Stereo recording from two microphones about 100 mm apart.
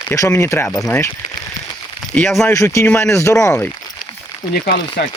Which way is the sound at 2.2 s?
5° left (ahead or behind).